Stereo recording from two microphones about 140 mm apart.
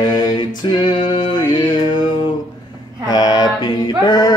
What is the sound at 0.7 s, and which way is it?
Music, 35° left (ahead or behind).